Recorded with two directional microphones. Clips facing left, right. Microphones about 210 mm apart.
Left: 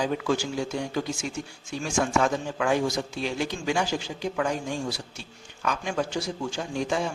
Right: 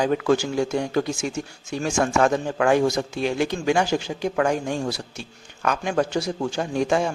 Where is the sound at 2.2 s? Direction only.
60° right (ahead or behind).